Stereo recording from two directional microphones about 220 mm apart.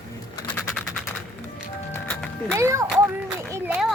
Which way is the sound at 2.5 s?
15° right (ahead or behind).